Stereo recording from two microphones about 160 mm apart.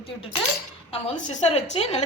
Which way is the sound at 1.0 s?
45° left (ahead or behind).